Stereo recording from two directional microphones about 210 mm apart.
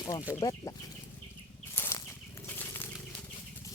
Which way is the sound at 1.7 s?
10° left (ahead or behind).